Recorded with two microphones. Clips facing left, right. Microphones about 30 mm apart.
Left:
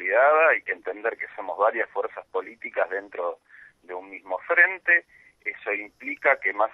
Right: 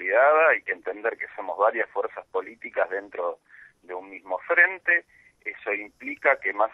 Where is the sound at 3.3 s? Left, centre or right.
Left.